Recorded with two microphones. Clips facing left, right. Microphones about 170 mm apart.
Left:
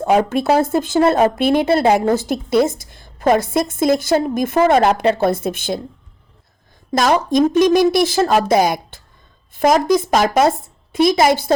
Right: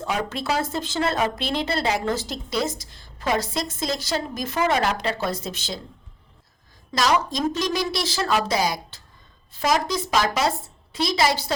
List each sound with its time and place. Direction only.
0.0 s a woman's voice: 50° left (ahead or behind)
6.9 s a woman's voice: 50° left (ahead or behind)